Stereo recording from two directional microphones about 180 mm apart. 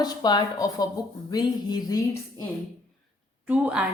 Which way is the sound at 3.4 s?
10° right (ahead or behind).